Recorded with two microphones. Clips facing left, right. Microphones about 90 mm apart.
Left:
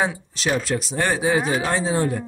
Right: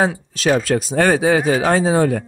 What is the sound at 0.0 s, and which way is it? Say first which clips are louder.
Speech: right 5 dB; 45° right (ahead or behind).